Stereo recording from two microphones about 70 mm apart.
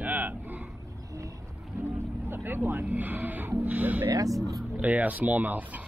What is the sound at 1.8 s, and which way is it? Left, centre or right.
Vehicle, right.